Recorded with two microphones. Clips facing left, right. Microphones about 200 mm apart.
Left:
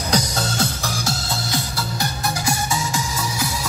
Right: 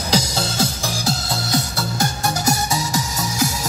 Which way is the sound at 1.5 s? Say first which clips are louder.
Right 7 dB; 45° right (ahead or behind).